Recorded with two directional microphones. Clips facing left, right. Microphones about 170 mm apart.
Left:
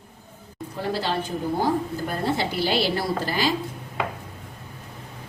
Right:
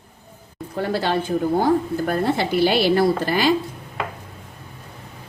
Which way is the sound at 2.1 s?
60° right (ahead or behind).